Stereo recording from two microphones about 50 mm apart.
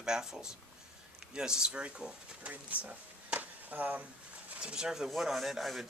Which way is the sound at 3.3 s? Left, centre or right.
Right.